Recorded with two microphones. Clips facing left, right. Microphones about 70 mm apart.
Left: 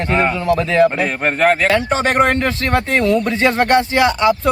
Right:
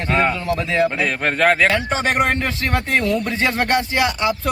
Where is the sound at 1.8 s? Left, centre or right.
Left.